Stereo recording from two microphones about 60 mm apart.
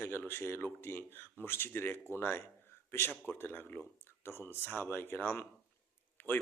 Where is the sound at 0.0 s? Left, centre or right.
Left.